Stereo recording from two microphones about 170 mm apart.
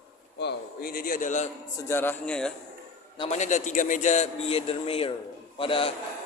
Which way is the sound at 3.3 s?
45° left (ahead or behind).